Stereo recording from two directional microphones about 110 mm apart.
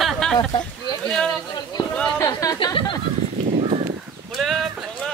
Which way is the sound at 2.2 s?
30° left (ahead or behind).